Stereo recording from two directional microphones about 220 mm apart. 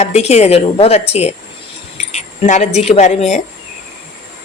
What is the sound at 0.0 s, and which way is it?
A woman's voice, 30° left (ahead or behind).